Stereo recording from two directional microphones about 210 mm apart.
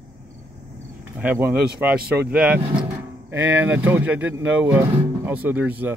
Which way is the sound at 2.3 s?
5° right (ahead or behind).